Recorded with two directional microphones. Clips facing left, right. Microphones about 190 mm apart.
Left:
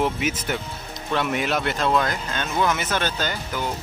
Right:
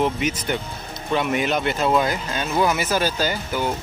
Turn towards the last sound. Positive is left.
turn(degrees=-10)  # may be behind; listen again after turning